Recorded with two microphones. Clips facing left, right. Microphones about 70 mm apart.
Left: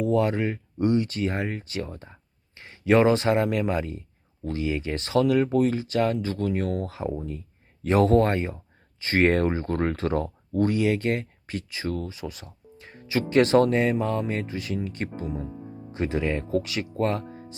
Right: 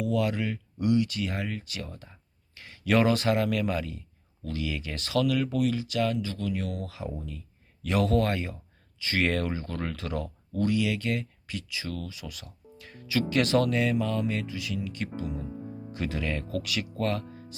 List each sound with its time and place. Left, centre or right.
0.0 s speech: left